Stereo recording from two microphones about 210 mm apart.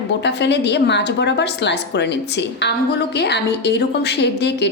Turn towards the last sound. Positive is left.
turn(degrees=55)  # may be behind; listen again after turning